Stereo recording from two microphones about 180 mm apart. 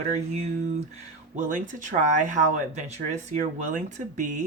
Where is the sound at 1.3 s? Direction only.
45° right (ahead or behind).